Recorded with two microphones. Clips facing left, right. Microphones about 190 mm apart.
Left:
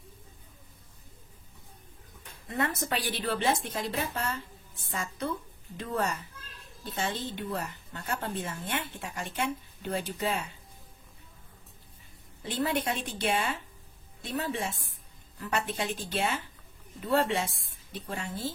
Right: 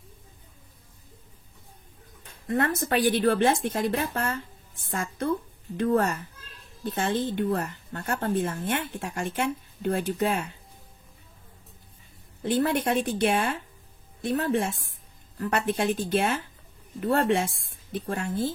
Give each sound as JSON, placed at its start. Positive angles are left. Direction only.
{"t": 2.4, "sound": "a woman's voice", "side_deg": -50}
{"t": 5.8, "sound": "a woman's voice", "side_deg": -55}
{"t": 12.6, "sound": "a woman's voice", "side_deg": -55}